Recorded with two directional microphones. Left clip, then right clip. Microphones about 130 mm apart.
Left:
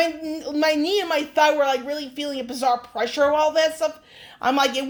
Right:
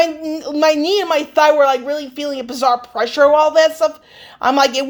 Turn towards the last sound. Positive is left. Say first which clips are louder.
# right 7 dB
turn(degrees=-35)  # may be behind; listen again after turning